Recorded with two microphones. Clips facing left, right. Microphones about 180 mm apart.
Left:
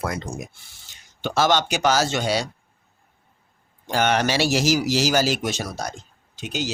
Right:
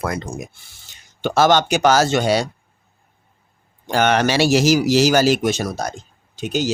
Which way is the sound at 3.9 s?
65° right (ahead or behind).